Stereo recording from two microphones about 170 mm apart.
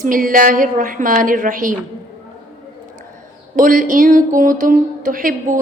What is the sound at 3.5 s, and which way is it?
Speech, 55° right (ahead or behind).